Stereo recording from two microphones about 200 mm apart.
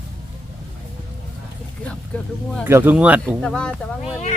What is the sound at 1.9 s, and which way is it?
Speech, 5° left (ahead or behind).